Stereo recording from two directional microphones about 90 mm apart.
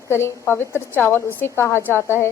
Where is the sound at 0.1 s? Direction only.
25° left (ahead or behind).